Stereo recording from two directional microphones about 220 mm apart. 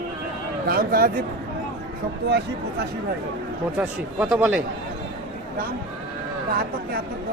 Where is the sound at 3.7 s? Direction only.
10° right (ahead or behind).